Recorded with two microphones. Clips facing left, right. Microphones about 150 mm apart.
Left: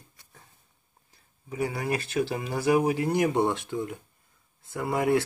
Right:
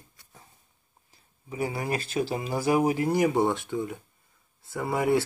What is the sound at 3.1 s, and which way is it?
Speech, centre (ahead or behind).